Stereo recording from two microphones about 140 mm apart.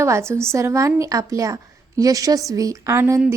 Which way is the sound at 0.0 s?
20° right (ahead or behind).